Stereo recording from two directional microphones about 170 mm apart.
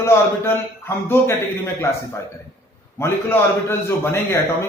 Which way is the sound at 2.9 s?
15° left (ahead or behind).